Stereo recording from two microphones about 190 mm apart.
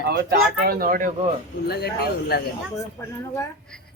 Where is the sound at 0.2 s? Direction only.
55° right (ahead or behind).